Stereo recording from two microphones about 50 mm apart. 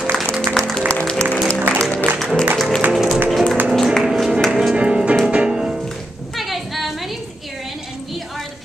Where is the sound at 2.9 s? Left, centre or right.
Centre.